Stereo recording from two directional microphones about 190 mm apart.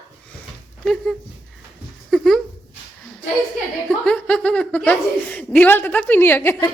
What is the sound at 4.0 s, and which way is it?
A woman's voice, 5° left (ahead or behind).